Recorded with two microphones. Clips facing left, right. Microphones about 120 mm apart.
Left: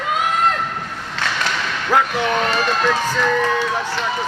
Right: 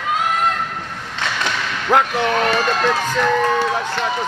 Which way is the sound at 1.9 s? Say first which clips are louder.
Right 2 dB; 20° right (ahead or behind).